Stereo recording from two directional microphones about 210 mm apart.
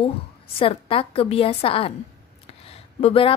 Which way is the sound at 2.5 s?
30° left (ahead or behind).